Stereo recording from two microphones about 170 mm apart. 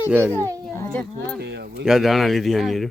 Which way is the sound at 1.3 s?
80° right.